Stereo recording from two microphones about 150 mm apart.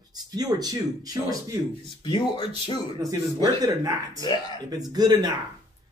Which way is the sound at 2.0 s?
30° left (ahead or behind).